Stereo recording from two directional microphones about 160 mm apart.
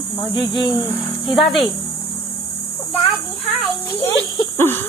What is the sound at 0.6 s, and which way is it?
Speech, 25° left (ahead or behind).